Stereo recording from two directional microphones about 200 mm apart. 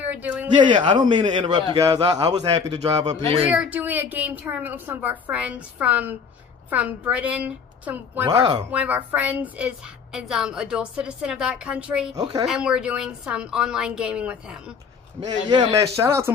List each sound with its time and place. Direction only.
0.0 s a sound: 10° right (ahead or behind)
0.5 s a man's voice: 25° right (ahead or behind)
3.5 s a woman's voice: 10° right (ahead or behind)
8.3 s a man's voice: 20° right (ahead or behind)
8.7 s a woman's voice: 5° right (ahead or behind)
12.2 s a man's voice: 20° right (ahead or behind)
12.4 s a woman's voice: 5° right (ahead or behind)
15.1 s a woman's voice: 20° right (ahead or behind)